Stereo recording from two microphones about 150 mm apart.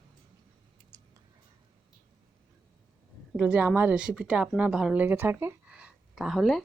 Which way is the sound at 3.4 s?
10° right (ahead or behind).